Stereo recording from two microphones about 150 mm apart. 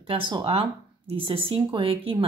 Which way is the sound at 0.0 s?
35° right (ahead or behind).